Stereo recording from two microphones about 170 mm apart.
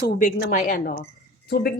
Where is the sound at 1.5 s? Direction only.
65° left (ahead or behind).